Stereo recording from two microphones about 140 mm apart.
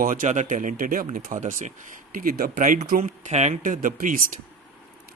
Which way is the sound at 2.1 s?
90° right.